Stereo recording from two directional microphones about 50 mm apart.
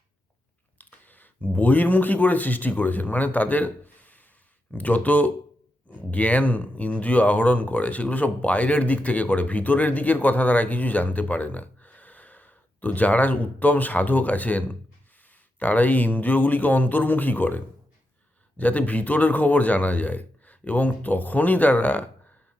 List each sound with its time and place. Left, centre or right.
0.8 s speech: left